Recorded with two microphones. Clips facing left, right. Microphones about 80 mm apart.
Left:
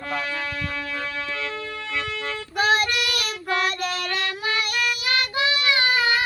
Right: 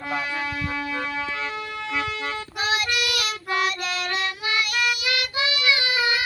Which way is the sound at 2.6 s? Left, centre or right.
Left.